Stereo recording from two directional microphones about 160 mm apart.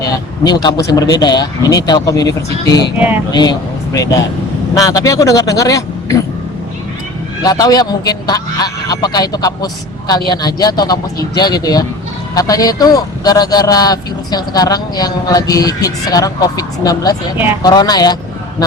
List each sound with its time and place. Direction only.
0.4 s speech: 25° left (ahead or behind)
3.9 s speech: 20° left (ahead or behind)
7.4 s speech: 25° left (ahead or behind)